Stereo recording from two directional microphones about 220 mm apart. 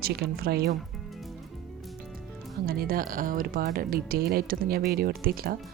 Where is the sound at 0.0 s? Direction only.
45° right (ahead or behind).